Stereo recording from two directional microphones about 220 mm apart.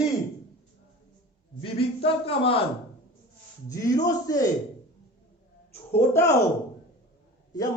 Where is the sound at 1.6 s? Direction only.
25° left (ahead or behind).